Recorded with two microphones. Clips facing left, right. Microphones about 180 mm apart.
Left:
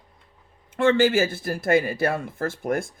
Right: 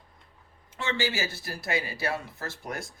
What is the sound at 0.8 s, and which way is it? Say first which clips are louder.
Speech: left 12 dB; 55° left (ahead or behind).